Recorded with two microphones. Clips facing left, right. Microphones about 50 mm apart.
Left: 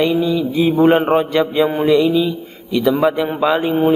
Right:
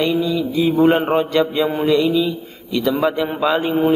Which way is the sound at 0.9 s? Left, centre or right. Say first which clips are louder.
Left 2 dB; centre.